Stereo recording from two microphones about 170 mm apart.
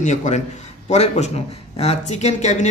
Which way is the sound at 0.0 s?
45° left (ahead or behind).